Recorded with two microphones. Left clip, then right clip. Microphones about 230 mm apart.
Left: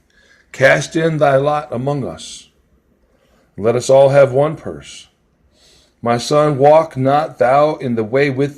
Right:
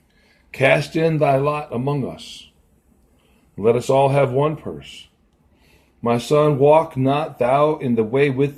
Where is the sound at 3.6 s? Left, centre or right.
Left.